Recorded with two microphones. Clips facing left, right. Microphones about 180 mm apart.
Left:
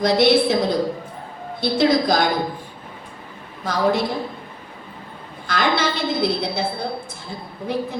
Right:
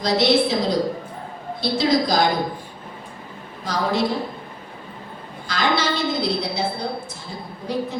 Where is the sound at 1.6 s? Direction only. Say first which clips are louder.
Left 2 dB; 55° left (ahead or behind).